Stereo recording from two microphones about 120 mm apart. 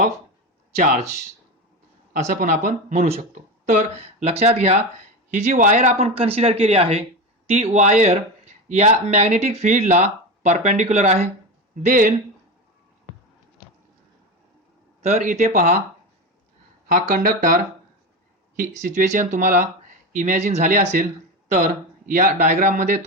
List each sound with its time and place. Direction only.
0.8 s speech: 90° right
2.1 s speech: 90° right; by 4.8 s 65° right (ahead or behind)
5.3 s speech: 85° right; by 11.2 s 70° right (ahead or behind)
11.7 s speech: 90° right
15.0 s speech: 80° right
16.9 s speech: 90° right
18.9 s speech: 90° right
22.1 s speech: 90° right